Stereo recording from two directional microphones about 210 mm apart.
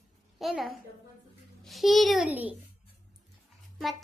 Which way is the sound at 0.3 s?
Centre (ahead or behind).